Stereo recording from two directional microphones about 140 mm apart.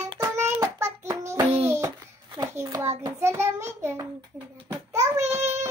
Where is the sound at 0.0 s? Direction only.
25° right (ahead or behind).